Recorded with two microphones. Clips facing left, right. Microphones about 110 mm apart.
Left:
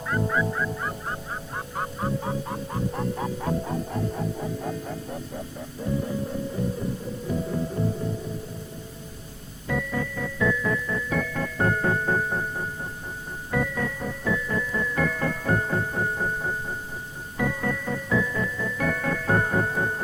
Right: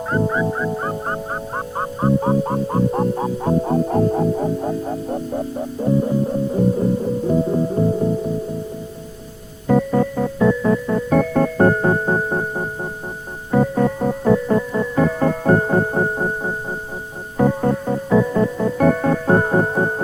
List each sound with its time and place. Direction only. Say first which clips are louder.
0.1 s music: right 6 dB; 30° right (ahead or behind); by 4.5 s 45° right (ahead or behind)
4.6 s music: right 9 dB; 35° right (ahead or behind)
9.6 s music: right 12 dB; 45° right (ahead or behind)